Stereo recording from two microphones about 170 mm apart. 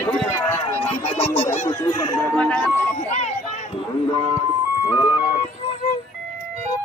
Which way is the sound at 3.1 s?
40° left (ahead or behind).